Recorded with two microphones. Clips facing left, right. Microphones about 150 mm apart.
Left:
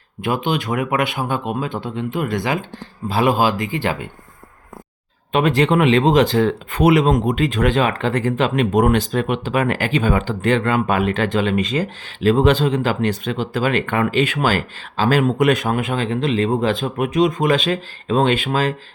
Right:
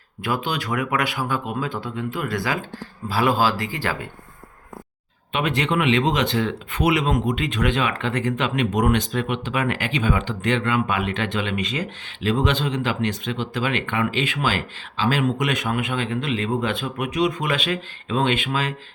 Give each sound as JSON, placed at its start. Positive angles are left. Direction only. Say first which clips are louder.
{"t": 0.2, "sound": "speech", "louder": "left 5 dB", "side_deg": 20}
{"t": 5.3, "sound": "speech", "louder": "left 7 dB", "side_deg": 40}
{"t": 8.7, "sound": "speech", "louder": "left 5 dB", "side_deg": 50}